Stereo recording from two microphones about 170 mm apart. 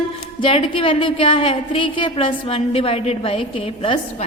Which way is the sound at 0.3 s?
30° left (ahead or behind).